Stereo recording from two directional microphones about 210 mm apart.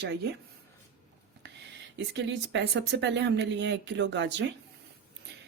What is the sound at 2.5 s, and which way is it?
Speech, 55° right (ahead or behind).